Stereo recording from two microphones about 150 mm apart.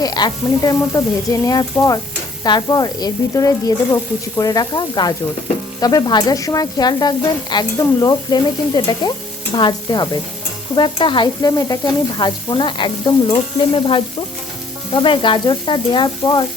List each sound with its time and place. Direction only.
0.0 s stir: 25° left (ahead or behind)
10.8 s sizzle: 30° left (ahead or behind)